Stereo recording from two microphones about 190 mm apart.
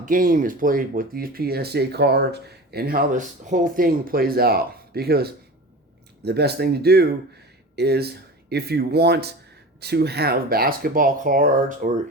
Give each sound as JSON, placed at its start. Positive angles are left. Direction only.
{"t": 0.0, "sound": "speech", "side_deg": -45}